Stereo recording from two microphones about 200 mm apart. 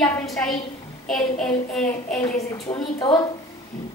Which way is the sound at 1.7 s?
5° left (ahead or behind).